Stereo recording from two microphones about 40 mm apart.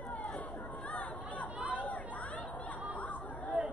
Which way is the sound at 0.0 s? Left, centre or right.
Left.